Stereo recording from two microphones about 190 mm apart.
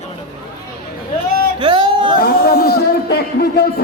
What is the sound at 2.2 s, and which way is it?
Speech, 55° left (ahead or behind).